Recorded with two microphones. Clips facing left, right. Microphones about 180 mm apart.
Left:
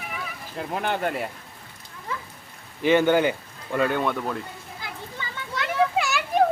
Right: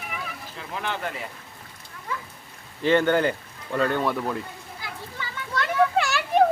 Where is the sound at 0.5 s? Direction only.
50° left (ahead or behind).